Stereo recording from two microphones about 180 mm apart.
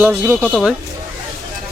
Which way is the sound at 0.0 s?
5° right (ahead or behind).